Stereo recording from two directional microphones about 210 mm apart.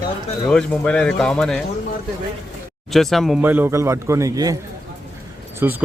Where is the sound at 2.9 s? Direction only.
Centre (ahead or behind); by 4.6 s 15° right (ahead or behind).